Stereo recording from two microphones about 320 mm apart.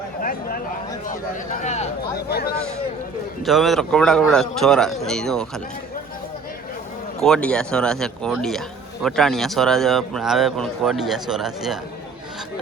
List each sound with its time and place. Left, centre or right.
0.2 s speech: left
3.4 s speech: centre
7.2 s speech: centre